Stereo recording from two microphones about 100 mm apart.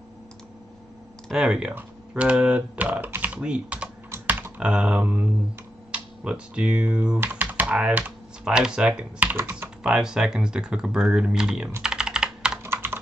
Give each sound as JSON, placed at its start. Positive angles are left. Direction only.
{"t": 1.3, "sound": "speech", "side_deg": -5}
{"t": 7.2, "sound": "computer keyboard", "side_deg": -15}
{"t": 7.6, "sound": "speech", "side_deg": -10}
{"t": 9.8, "sound": "speech", "side_deg": -10}
{"t": 11.8, "sound": "computer keyboard", "side_deg": -5}
{"t": 12.6, "sound": "computer keyboard", "side_deg": -25}